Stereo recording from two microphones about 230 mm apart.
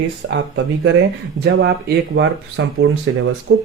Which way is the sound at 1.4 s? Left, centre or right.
Right.